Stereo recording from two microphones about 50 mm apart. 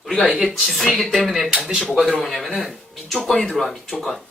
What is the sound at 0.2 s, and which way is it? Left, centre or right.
Speech, centre.